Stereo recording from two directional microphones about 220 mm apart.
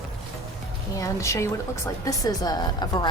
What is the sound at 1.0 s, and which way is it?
Speech, 15° left (ahead or behind).